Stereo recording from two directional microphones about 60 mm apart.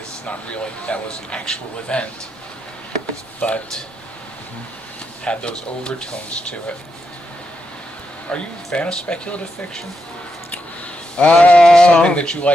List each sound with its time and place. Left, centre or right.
0.3 s speech: centre
3.4 s speech: centre
5.2 s speech: centre
8.3 s speech: centre
11.2 s speech: left